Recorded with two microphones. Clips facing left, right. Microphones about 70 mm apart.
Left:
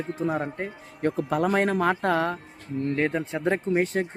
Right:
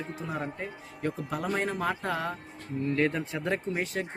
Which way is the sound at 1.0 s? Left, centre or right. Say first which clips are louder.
Left 8 dB; left.